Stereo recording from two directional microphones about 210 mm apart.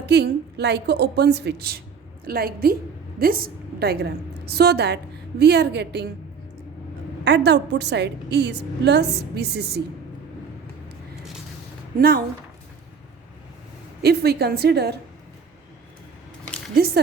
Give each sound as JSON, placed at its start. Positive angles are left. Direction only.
{"t": 0.0, "sound": "a woman's voice", "side_deg": -50}
{"t": 7.3, "sound": "a woman's voice", "side_deg": -55}
{"t": 11.9, "sound": "a woman's voice", "side_deg": -45}
{"t": 14.0, "sound": "a woman's voice", "side_deg": -50}
{"t": 16.7, "sound": "a woman's voice", "side_deg": -45}